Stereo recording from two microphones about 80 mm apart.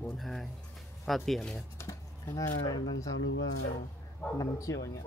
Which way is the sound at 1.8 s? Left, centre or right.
Left.